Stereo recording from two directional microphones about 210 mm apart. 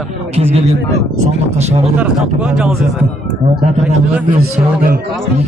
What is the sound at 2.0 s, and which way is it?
Speech, 5° right (ahead or behind).